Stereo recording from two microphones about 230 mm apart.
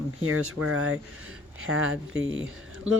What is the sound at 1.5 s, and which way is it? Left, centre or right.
Speech, right.